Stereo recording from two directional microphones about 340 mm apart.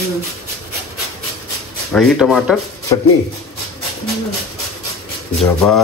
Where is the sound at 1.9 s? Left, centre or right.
Centre.